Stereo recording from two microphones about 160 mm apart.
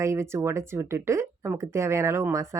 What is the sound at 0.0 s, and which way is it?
Speech, 15° right (ahead or behind).